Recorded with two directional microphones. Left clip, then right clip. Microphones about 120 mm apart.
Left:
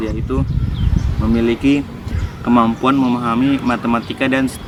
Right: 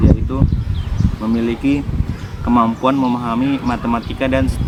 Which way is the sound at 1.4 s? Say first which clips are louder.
Left 4 dB; 15° left (ahead or behind).